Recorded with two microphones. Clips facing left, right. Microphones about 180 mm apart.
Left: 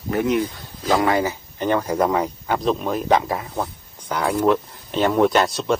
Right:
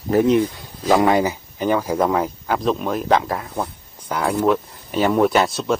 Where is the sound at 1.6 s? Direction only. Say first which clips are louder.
Right 1 dB; 5° right (ahead or behind).